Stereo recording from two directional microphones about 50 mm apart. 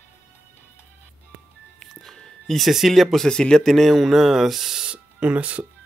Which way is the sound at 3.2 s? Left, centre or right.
Centre.